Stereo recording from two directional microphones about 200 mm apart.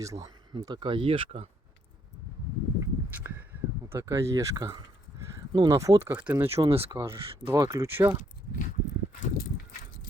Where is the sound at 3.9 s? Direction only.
15° right (ahead or behind).